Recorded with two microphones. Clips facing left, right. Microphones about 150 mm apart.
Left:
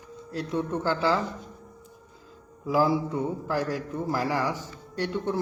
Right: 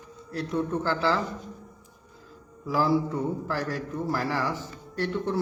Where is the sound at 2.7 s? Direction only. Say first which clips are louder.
Left 1 dB; 15° left (ahead or behind).